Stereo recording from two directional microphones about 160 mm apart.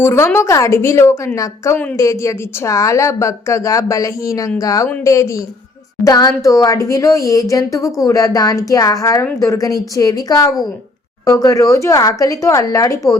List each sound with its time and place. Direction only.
0.0 s a woman's voice: 15° left (ahead or behind)